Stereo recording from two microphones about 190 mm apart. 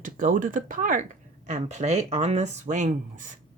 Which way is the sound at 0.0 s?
45° right (ahead or behind).